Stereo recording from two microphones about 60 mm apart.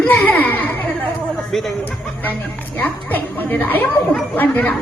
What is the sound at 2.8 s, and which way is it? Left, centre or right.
A woman's voice, left.